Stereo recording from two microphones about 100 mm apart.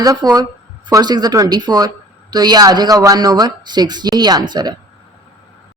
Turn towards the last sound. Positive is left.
turn(degrees=-45)  # may be behind; listen again after turning